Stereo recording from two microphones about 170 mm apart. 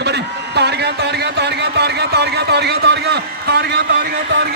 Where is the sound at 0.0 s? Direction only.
80° right.